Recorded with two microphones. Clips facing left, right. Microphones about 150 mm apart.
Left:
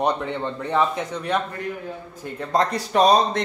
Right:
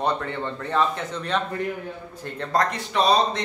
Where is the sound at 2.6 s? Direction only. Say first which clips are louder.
Left 7 dB; 40° left (ahead or behind).